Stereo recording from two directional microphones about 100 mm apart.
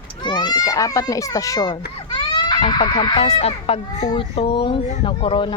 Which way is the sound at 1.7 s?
55° left (ahead or behind).